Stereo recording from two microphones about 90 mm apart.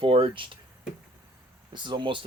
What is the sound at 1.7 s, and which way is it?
Speech, 60° right (ahead or behind).